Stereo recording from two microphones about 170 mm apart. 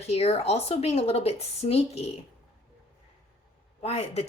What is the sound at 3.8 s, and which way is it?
Speech, 40° left (ahead or behind).